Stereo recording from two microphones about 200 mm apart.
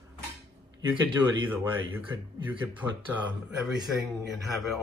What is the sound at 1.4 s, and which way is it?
Speech, 10° right (ahead or behind).